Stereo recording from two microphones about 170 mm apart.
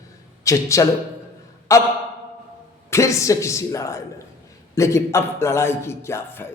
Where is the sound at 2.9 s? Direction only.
20° left (ahead or behind).